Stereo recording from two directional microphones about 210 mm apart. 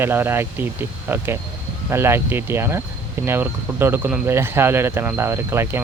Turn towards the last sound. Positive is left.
turn(degrees=-10)  # may be behind; listen again after turning